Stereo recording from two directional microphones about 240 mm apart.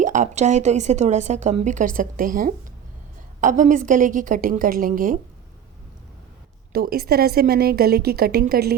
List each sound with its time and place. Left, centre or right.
0.0 s a woman's voice: right
6.7 s a woman's voice: right